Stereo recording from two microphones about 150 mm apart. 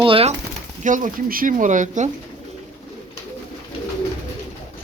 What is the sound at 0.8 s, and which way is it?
Speech, 60° right (ahead or behind).